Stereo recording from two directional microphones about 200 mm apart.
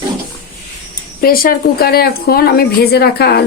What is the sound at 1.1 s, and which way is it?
A woman's voice, 50° left (ahead or behind).